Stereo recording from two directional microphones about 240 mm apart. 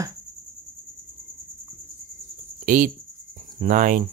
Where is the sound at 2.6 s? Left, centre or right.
Right.